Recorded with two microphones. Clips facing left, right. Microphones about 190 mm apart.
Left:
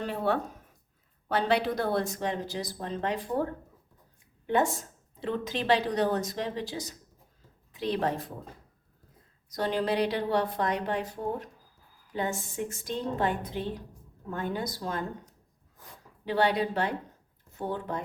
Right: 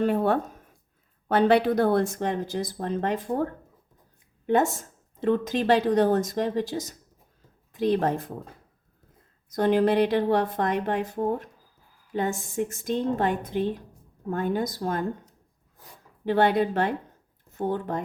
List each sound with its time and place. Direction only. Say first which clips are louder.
0.0 s a woman's voice: right 6 dB; 50° right (ahead or behind)
9.5 s a woman's voice: right 7 dB; 50° right (ahead or behind)
16.2 s a woman's voice: right 5 dB; 50° right (ahead or behind)